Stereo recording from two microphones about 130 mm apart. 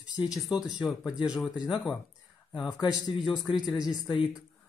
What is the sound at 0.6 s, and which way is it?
Speech, 5° right (ahead or behind).